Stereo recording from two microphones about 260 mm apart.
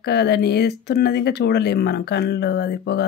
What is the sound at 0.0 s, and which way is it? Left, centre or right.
Speech, left.